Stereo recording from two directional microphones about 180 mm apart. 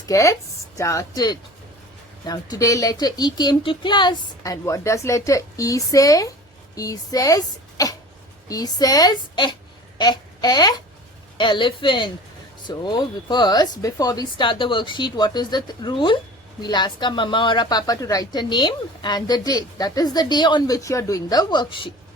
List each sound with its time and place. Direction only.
0.0 s a woman's voice: 15° left (ahead or behind)